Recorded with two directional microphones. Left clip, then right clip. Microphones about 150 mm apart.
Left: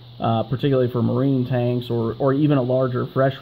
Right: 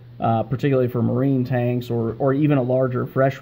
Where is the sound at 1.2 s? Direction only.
5° left (ahead or behind).